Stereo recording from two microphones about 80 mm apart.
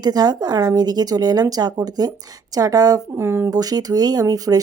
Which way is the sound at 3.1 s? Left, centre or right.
Right.